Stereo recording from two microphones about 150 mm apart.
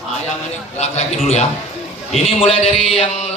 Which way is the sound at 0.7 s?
50° left (ahead or behind).